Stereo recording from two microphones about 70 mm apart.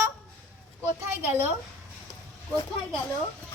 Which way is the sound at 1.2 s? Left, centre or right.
Right.